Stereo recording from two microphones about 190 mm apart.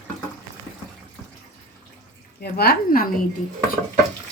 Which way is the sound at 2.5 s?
50° left (ahead or behind).